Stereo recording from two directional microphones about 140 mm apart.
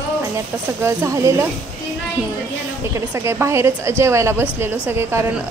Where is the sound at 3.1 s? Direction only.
20° right (ahead or behind).